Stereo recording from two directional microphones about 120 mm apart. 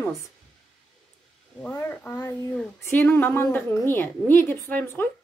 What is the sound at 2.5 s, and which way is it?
A woman's voice, 10° left (ahead or behind).